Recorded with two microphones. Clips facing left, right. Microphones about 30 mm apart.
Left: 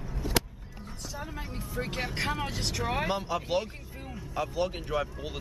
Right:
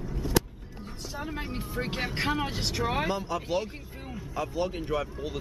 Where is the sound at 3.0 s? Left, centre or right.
Centre.